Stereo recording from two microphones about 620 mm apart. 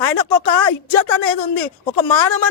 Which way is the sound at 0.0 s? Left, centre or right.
Left.